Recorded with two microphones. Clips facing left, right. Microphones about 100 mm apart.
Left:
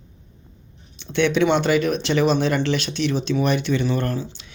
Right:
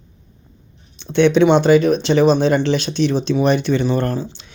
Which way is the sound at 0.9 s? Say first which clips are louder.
Right 6 dB; 30° right (ahead or behind).